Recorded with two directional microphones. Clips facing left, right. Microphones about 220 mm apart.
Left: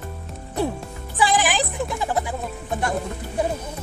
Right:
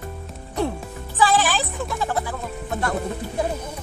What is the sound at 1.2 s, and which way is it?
Music, 15° left (ahead or behind).